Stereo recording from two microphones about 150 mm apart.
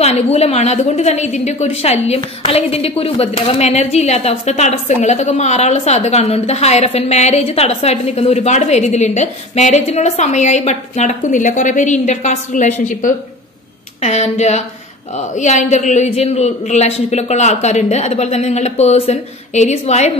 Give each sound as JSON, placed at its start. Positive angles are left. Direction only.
{"t": 0.0, "sound": "a woman's voice", "side_deg": 45}
{"t": 14.0, "sound": "a woman's voice", "side_deg": 45}